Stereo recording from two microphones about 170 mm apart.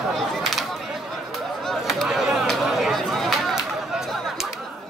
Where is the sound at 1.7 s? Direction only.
Centre (ahead or behind).